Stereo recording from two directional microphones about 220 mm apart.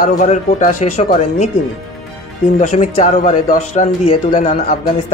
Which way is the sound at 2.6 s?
30° left (ahead or behind).